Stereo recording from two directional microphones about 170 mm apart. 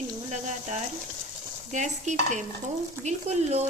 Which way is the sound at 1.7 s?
45° right (ahead or behind).